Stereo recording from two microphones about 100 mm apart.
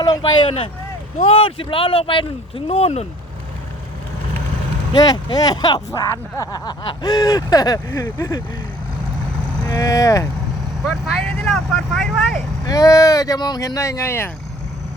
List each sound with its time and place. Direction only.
0.3 s speech: 65° left (ahead or behind)
2.6 s speech: 90° left
4.9 s speech: 45° left (ahead or behind)
7.9 s speech: 25° left (ahead or behind)
9.6 s speech: 35° left (ahead or behind)
10.8 s speech: 5° left (ahead or behind)
12.6 s speech: 35° left (ahead or behind)